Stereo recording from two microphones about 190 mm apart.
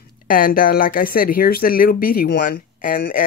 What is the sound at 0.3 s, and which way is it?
Speech, 50° left (ahead or behind).